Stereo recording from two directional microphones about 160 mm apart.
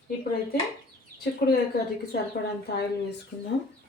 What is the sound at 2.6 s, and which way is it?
Speech, 80° left.